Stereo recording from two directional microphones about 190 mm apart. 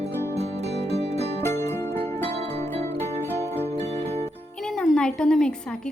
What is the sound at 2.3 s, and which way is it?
Music, 35° right (ahead or behind).